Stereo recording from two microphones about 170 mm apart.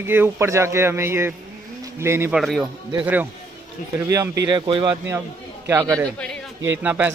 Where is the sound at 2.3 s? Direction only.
Centre (ahead or behind).